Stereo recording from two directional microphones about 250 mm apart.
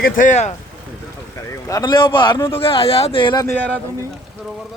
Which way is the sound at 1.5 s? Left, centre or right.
Centre.